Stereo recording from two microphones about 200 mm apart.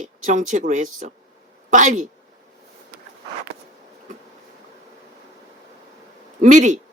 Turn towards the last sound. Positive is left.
turn(degrees=-40)  # may be behind; listen again after turning